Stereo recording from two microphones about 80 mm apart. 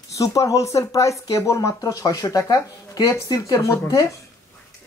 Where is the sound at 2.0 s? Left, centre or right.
Left.